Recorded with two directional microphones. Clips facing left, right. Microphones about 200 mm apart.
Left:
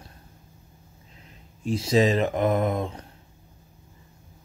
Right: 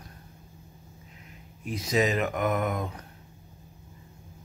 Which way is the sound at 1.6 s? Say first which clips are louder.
Left 5 dB; 30° left (ahead or behind).